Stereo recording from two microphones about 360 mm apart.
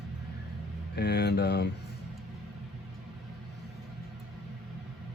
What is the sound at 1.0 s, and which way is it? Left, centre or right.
Speech, left.